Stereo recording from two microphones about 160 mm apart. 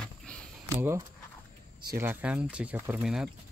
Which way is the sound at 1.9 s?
10° right (ahead or behind).